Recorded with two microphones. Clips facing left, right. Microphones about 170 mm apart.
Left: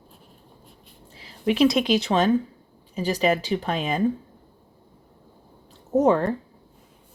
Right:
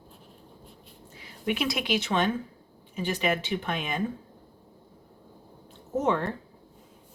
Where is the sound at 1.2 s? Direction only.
30° left (ahead or behind).